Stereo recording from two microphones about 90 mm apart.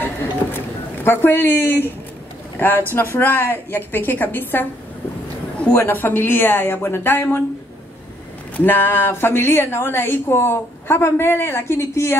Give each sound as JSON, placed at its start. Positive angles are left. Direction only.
{"t": 1.0, "sound": "a woman's voice", "side_deg": 25}
{"t": 2.9, "sound": "a woman's voice", "side_deg": 25}
{"t": 5.7, "sound": "a woman's voice", "side_deg": 25}
{"t": 8.5, "sound": "a woman's voice", "side_deg": 20}